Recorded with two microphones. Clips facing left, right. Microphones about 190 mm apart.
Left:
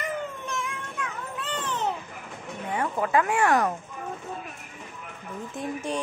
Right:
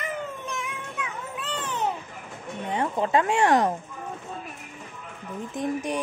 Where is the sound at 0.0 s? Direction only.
Centre (ahead or behind).